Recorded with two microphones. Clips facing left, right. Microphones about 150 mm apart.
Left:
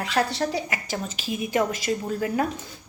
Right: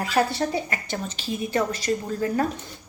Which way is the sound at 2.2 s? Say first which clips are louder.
Right 2 dB; 10° left (ahead or behind).